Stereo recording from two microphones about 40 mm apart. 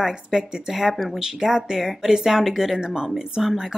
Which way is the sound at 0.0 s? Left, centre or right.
Centre.